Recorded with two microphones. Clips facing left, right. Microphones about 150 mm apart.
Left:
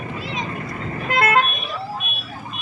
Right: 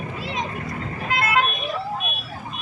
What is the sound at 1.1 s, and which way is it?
Vehicle, 50° left (ahead or behind).